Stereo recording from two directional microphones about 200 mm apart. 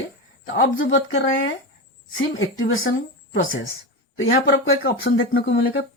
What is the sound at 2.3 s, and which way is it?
Speech, 80° left.